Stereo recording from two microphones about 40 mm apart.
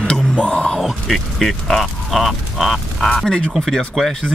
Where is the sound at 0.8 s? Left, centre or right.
Centre.